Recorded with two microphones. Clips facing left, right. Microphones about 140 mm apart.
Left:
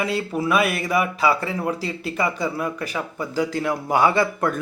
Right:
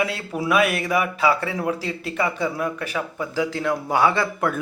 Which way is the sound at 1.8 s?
10° left (ahead or behind).